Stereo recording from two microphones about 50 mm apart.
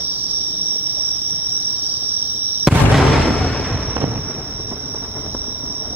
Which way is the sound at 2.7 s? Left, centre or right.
Centre.